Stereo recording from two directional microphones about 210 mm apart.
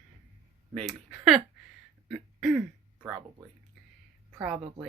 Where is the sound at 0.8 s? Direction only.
Centre (ahead or behind).